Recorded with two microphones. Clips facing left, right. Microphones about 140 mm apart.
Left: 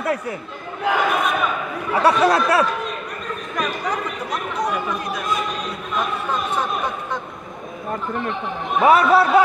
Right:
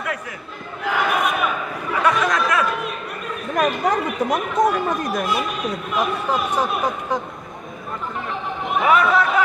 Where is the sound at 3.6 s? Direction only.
50° right (ahead or behind).